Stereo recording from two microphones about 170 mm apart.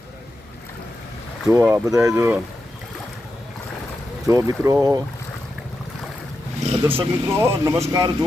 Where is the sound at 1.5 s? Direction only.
15° right (ahead or behind).